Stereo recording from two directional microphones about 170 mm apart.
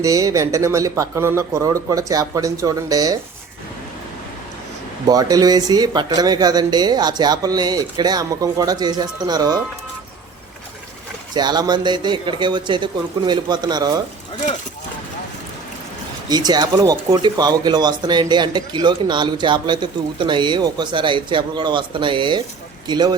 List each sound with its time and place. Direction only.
0.0 s speech: 20° right (ahead or behind)
5.0 s speech: 20° right (ahead or behind)
11.3 s speech: 25° right (ahead or behind)
16.3 s speech: 25° right (ahead or behind)